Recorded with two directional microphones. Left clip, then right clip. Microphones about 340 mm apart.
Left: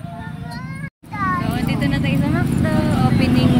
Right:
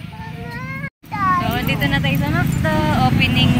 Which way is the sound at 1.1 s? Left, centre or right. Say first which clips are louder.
Right 4 dB; right.